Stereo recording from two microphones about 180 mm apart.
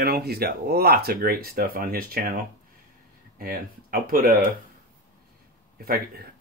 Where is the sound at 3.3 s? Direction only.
55° right (ahead or behind).